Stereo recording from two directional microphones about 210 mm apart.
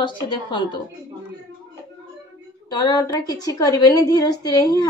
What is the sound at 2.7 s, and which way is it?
A woman's voice, 20° left (ahead or behind).